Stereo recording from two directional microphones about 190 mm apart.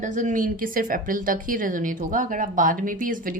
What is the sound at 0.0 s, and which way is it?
A woman's voice, 40° right (ahead or behind).